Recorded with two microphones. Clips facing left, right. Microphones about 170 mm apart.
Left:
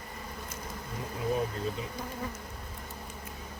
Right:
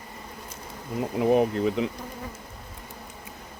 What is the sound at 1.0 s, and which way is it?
Speech, 70° right (ahead or behind).